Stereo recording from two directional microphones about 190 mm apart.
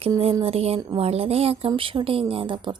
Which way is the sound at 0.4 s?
30° right (ahead or behind).